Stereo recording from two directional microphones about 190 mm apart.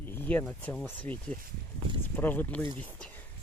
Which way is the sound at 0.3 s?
10° left (ahead or behind).